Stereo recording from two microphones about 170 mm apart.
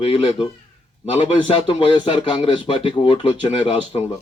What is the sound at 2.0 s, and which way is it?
A man's voice, 30° left (ahead or behind).